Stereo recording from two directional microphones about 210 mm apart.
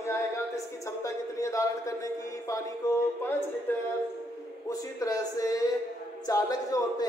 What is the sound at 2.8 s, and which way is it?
Speech, 15° left (ahead or behind).